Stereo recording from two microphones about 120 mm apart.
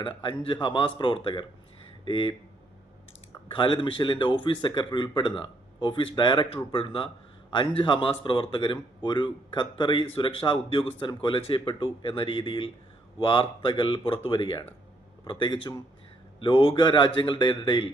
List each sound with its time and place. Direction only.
0.0 s speech: 40° left (ahead or behind)
3.5 s a man's voice: 45° left (ahead or behind)